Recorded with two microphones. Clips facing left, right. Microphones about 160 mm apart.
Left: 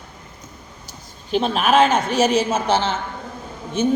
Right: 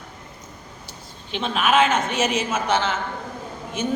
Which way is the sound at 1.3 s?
40° left (ahead or behind).